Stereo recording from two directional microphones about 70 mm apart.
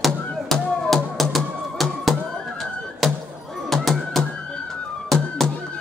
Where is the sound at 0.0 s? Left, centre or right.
Centre.